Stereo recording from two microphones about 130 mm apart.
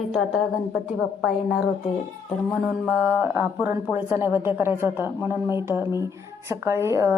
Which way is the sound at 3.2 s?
15° right (ahead or behind).